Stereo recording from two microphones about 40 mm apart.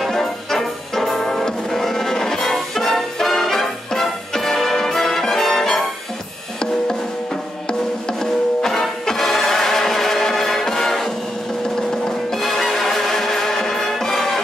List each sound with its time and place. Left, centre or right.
0.0 s music: centre
8.1 s music: centre
12.3 s music: centre